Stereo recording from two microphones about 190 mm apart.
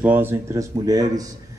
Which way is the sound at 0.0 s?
10° right (ahead or behind).